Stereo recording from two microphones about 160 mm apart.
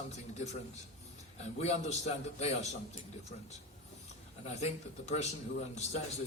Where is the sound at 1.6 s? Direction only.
45° left (ahead or behind).